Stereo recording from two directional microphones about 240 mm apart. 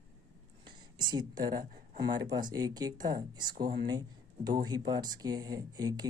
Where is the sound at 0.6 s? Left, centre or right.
Centre.